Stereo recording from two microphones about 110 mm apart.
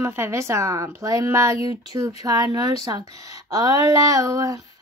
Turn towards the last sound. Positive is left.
turn(degrees=-30)  # may be behind; listen again after turning